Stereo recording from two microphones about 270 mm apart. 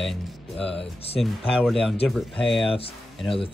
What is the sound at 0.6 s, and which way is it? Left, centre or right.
Speech, left.